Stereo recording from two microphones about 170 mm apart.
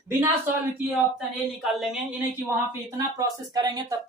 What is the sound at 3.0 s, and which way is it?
Speech, 20° right (ahead or behind).